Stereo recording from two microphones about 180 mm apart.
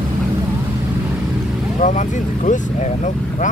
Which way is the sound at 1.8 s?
45° left (ahead or behind).